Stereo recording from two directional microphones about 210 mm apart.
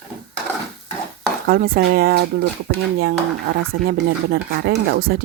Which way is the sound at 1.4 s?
45° right (ahead or behind).